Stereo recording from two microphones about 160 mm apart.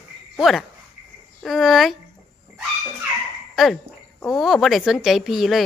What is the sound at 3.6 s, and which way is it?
Speech, centre (ahead or behind).